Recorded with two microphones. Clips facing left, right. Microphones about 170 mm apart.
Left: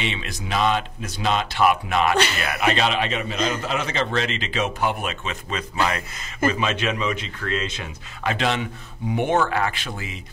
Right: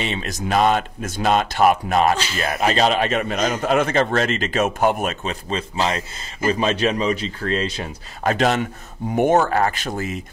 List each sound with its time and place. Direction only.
0.0 s a man's voice: 40° right (ahead or behind)
2.1 s speech: 65° left (ahead or behind)
2.6 s a man's voice: 40° right (ahead or behind)